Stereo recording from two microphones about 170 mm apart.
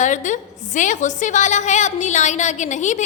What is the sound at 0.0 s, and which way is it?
A woman's voice, 50° left (ahead or behind).